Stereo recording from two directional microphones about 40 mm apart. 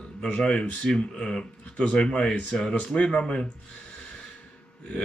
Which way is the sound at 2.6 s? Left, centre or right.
Left.